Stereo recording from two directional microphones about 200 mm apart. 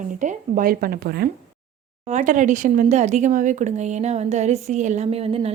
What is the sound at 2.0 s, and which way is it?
Speech, 35° right (ahead or behind).